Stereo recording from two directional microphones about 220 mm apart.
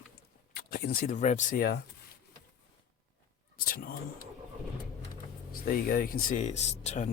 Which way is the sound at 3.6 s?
40° left (ahead or behind).